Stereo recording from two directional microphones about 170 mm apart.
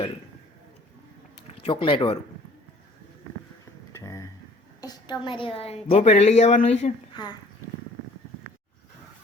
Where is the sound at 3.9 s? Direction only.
20° left (ahead or behind).